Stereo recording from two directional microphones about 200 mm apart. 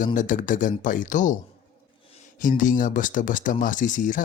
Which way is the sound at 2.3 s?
40° left (ahead or behind).